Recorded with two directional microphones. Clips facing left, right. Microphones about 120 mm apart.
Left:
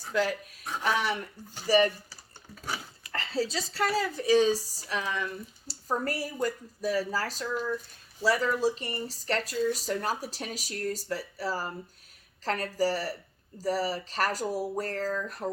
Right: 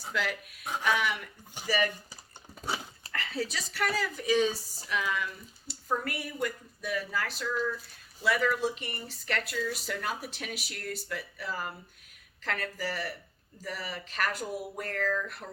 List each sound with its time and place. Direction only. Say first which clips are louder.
0.1 s speech: left 5 dB; 35° left (ahead or behind)
2.6 s dog: right 2 dB; 20° right (ahead or behind)
3.1 s speech: left 4 dB; 30° left (ahead or behind)